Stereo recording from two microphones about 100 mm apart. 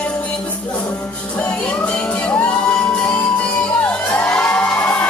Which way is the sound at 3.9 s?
10° left (ahead or behind).